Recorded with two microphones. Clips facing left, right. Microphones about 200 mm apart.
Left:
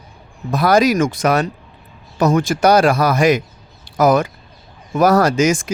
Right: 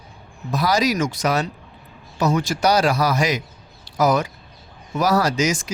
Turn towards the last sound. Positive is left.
turn(degrees=50)  # may be behind; listen again after turning